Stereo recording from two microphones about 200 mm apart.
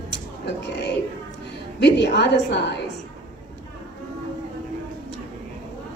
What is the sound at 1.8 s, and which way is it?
Speech, 55° left (ahead or behind).